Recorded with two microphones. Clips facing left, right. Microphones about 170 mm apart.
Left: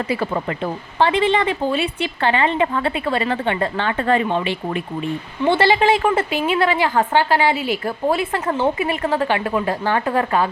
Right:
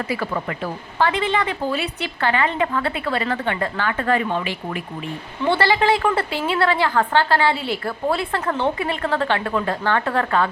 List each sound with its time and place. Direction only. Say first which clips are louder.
0.1 s a woman's voice: left 3 dB; 25° left (ahead or behind)